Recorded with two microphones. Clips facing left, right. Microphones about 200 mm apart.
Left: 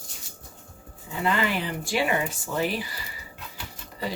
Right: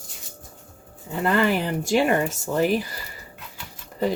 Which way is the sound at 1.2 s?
50° right (ahead or behind).